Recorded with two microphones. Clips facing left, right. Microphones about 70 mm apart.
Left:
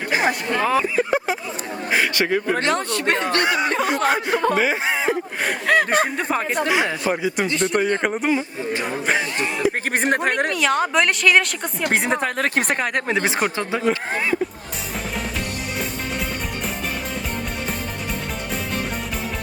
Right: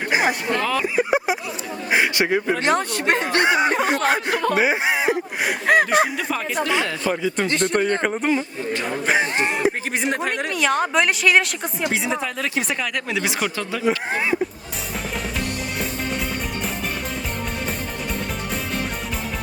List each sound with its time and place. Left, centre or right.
0.1 s a sound: centre
0.6 s speech: left
0.9 s a man's voice: centre
4.3 s speech: left
4.5 s speech: centre
6.1 s speech: left
6.7 s a woman's voice: centre
8.4 s speech: centre
9.2 s a sound: right
9.9 s speech: left
10.5 s a woman's voice: centre
11.9 s speech: left
14.1 s a man's voice: centre